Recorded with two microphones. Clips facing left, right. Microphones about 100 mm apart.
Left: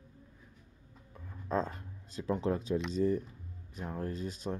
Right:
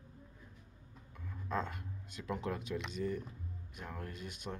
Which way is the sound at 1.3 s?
35° left (ahead or behind).